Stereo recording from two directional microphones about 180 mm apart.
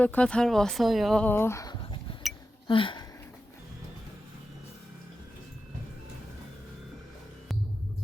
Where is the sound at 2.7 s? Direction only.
25° left (ahead or behind).